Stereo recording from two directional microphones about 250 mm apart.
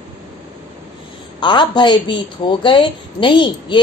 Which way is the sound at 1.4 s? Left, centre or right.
Centre.